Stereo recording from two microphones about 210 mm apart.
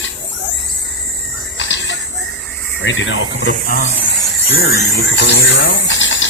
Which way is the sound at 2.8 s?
60° left (ahead or behind).